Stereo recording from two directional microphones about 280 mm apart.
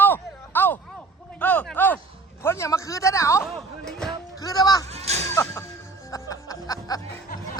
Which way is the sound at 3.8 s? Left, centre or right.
Centre.